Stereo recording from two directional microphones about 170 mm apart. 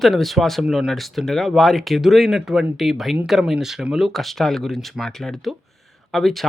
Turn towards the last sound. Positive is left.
turn(degrees=0)  # may be behind; listen again after turning